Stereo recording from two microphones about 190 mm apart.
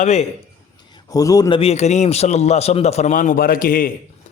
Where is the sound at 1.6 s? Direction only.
35° left (ahead or behind).